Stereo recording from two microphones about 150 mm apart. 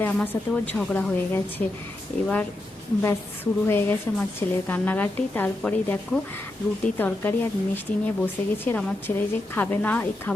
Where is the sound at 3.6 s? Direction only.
15° left (ahead or behind).